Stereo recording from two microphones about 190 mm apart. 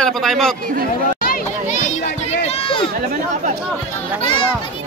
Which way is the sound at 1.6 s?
40° left (ahead or behind).